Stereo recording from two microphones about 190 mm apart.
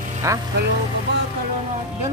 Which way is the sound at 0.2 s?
15° right (ahead or behind).